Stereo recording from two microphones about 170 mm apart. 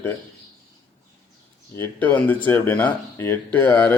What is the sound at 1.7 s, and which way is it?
Speech, 10° left (ahead or behind).